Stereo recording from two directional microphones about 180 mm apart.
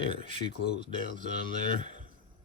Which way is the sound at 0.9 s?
45° right (ahead or behind).